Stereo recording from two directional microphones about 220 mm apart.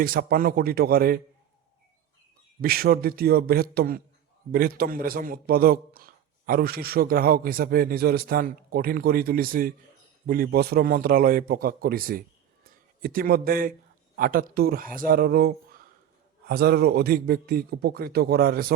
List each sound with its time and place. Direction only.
0.0 s a man's voice: 40° right (ahead or behind)
2.6 s a man's voice: 45° right (ahead or behind)